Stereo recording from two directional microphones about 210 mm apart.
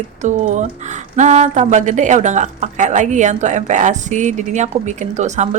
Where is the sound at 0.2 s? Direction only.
35° right (ahead or behind).